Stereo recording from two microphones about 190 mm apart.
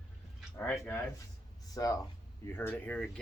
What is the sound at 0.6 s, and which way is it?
Speech, 10° left (ahead or behind).